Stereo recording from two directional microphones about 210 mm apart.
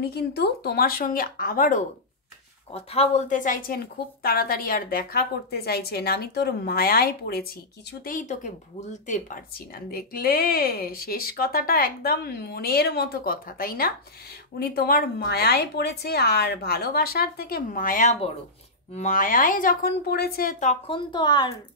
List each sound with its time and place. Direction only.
0.0 s a woman's voice: 50° left (ahead or behind)
2.7 s a woman's voice: 30° left (ahead or behind); by 20.7 s 45° left (ahead or behind)
20.8 s speech: 20° left (ahead or behind)